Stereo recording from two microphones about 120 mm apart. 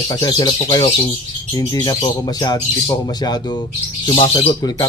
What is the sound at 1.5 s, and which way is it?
Speech, 35° left (ahead or behind).